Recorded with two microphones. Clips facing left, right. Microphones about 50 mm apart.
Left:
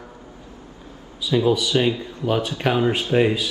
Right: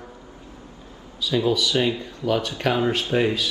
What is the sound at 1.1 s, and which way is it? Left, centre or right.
Speech, centre.